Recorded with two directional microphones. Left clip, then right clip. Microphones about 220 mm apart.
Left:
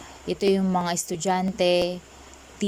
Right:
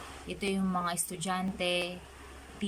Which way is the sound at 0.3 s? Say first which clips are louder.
Left 12 dB; 25° left (ahead or behind).